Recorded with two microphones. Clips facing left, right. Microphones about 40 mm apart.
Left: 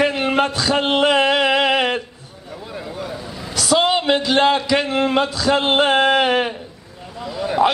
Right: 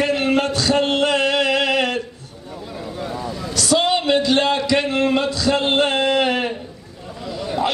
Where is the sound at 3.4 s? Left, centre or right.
Centre.